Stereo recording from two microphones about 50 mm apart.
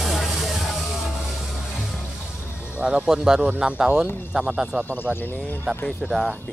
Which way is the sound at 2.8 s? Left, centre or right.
Centre.